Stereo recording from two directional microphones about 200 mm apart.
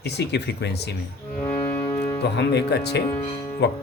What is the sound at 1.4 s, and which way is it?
Music, 15° left (ahead or behind).